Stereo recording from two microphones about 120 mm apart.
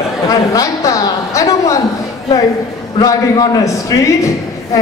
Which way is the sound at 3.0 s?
35° left (ahead or behind).